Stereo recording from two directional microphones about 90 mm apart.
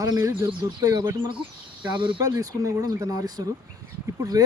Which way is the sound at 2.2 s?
40° right (ahead or behind).